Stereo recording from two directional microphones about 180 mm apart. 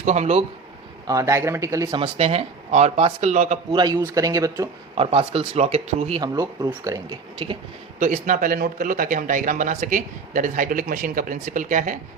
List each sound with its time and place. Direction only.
0.0 s speech: 40° right (ahead or behind)
1.0 s speech: 15° right (ahead or behind)
2.0 s speech: 35° right (ahead or behind)
3.8 s speech: 25° right (ahead or behind)
4.9 s speech: 30° right (ahead or behind)
7.9 s speech: 45° right (ahead or behind)